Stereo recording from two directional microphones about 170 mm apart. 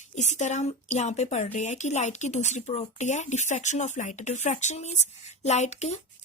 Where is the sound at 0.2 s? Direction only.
45° left (ahead or behind).